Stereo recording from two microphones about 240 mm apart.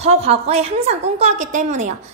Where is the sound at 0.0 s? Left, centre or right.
Right.